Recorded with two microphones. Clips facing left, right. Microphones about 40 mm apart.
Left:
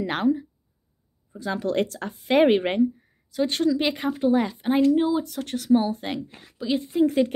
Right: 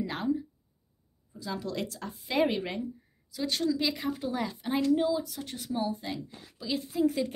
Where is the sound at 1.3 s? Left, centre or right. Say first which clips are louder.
Left 9 dB; left.